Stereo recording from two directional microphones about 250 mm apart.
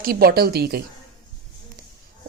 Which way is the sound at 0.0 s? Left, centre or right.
Right.